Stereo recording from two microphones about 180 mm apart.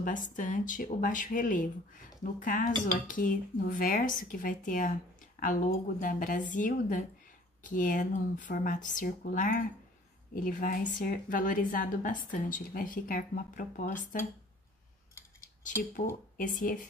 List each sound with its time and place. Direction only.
0.0 s a woman's voice: 45° left (ahead or behind)
15.2 s typing: 15° left (ahead or behind)
15.6 s a woman's voice: 45° left (ahead or behind)